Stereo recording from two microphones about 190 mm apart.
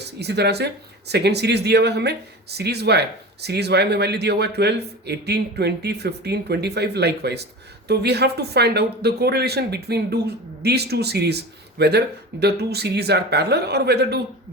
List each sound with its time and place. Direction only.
0.0 s speech: 60° right (ahead or behind)